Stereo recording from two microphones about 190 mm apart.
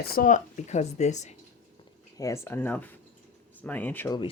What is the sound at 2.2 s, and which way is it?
Speech, 15° left (ahead or behind).